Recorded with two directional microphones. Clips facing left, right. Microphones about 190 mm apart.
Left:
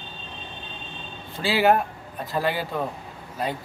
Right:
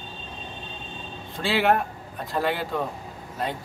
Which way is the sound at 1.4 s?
Centre (ahead or behind).